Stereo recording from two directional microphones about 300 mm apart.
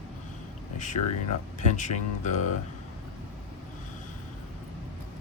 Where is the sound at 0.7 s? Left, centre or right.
Left.